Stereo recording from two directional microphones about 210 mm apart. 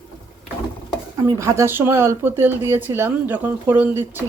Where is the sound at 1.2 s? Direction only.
15° right (ahead or behind).